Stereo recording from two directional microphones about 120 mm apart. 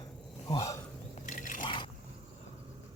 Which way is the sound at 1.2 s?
90° left.